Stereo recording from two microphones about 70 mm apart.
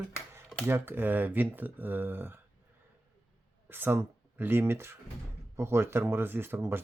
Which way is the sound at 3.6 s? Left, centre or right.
Right.